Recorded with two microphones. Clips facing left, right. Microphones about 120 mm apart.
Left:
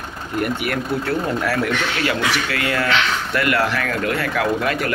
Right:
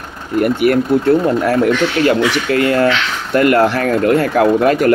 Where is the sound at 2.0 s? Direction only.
40° right (ahead or behind).